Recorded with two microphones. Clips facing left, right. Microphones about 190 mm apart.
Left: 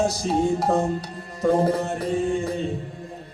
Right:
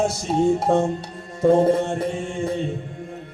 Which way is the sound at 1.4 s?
25° right (ahead or behind).